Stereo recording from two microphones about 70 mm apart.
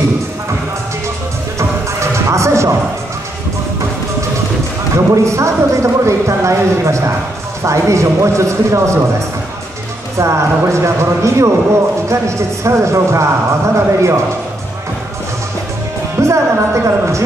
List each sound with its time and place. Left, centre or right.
1.6 s music: right
4.9 s speech: right
10.1 s speech: right
16.2 s speech: right